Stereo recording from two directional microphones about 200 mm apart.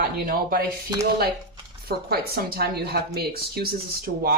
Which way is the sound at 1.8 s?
50° right (ahead or behind).